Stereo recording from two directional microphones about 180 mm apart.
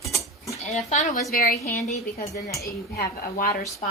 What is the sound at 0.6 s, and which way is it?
Speech, 40° left (ahead or behind).